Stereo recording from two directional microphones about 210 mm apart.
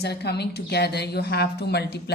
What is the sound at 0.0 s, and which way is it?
A woman's voice, 50° left (ahead or behind).